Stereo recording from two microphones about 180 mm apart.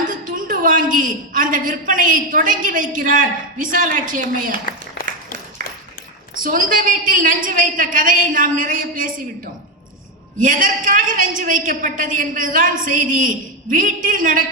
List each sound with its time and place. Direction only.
0.1 s a woman's voice: 50° right (ahead or behind)
5.0 s applause: 80° left
6.4 s a woman's voice: 50° right (ahead or behind)
10.4 s a woman's voice: 50° right (ahead or behind)